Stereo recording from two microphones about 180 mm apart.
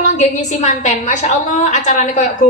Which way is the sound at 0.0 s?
40° left (ahead or behind).